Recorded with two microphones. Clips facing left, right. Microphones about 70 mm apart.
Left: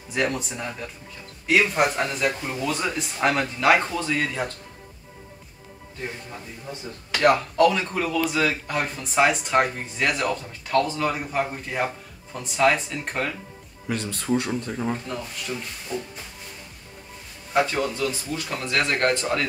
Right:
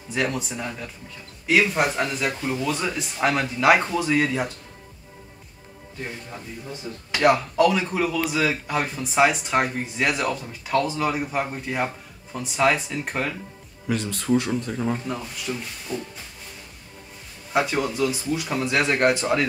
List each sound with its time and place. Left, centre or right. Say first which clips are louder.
0.1 s speech: even; centre
7.2 s speech: even; centre
17.5 s speech: even; centre